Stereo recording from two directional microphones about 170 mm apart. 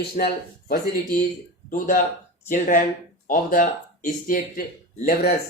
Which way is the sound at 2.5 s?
50° left (ahead or behind).